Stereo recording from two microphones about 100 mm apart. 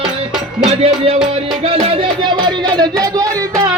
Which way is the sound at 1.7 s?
75° right (ahead or behind).